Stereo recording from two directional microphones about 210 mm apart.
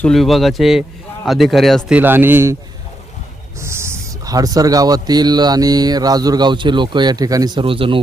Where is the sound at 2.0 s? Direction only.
10° right (ahead or behind).